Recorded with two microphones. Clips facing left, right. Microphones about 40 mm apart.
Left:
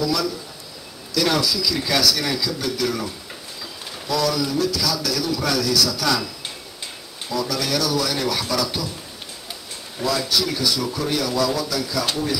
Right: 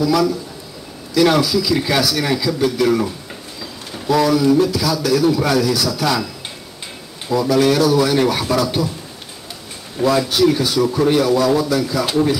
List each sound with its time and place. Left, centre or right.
0.0 s a man's voice: centre
4.1 s a man's voice: right
7.2 s a man's voice: right
10.0 s a man's voice: right